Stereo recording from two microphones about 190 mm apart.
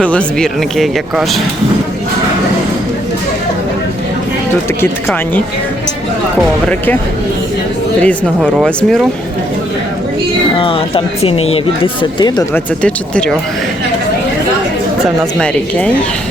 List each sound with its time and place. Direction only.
0.0 s speech: 5° left (ahead or behind)
6.7 s speech: 10° left (ahead or behind)
8.0 s speech: centre (ahead or behind)
10.6 s speech: 30° left (ahead or behind)
12.5 s speech: 5° left (ahead or behind)
15.4 s speech: 5° left (ahead or behind)